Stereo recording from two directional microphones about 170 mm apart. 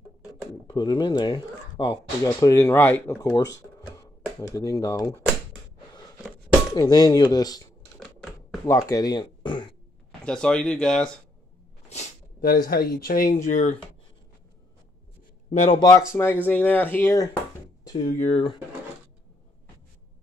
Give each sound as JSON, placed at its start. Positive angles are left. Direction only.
{"t": 0.7, "sound": "speech", "side_deg": 25}
{"t": 6.3, "sound": "speech", "side_deg": 25}
{"t": 8.6, "sound": "speech", "side_deg": 20}
{"t": 10.2, "sound": "speech", "side_deg": 5}
{"t": 12.4, "sound": "speech", "side_deg": 55}
{"t": 15.5, "sound": "speech", "side_deg": 40}
{"t": 16.1, "sound": "speech", "side_deg": 15}
{"t": 18.0, "sound": "speech", "side_deg": 45}